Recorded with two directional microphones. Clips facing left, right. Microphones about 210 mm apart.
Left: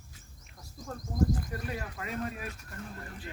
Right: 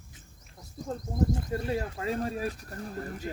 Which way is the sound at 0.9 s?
25° right (ahead or behind).